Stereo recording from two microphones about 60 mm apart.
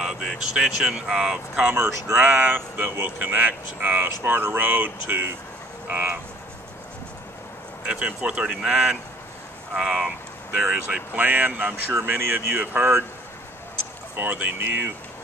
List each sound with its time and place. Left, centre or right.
0.0 s speech: centre
2.1 s speech: right
5.9 s frog: right
7.8 s speech: centre
10.9 s speech: right
11.9 s speech: right
14.1 s speech: right